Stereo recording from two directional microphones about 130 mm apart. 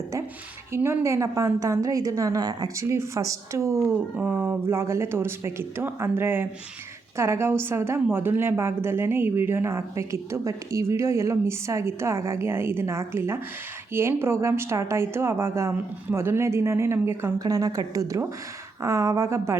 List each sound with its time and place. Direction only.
0.7 s speech: 20° right (ahead or behind)